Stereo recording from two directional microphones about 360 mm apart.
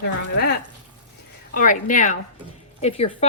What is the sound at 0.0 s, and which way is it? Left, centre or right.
Speech, left.